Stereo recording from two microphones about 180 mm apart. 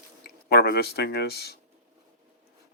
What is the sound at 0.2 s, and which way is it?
Speech, 60° left (ahead or behind).